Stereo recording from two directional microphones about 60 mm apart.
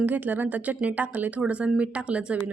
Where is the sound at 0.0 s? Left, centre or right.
Right.